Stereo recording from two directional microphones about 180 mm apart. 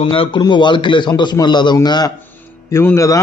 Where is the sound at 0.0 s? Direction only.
30° left (ahead or behind).